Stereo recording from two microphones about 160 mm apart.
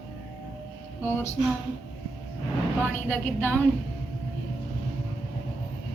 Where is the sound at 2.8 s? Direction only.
10° left (ahead or behind).